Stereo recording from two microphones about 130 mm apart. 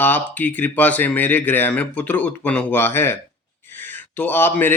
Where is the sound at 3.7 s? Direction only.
15° left (ahead or behind).